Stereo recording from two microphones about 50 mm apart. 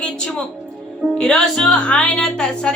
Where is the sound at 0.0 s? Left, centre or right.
Centre.